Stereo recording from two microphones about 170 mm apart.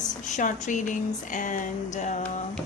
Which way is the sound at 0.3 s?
45° left (ahead or behind).